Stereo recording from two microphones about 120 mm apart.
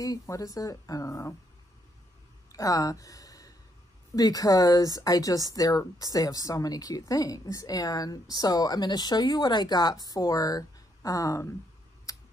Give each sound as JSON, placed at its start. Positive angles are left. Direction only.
{"t": 0.0, "sound": "a woman's voice", "side_deg": 30}
{"t": 2.5, "sound": "speech", "side_deg": 30}
{"t": 12.1, "sound": "a sound", "side_deg": 30}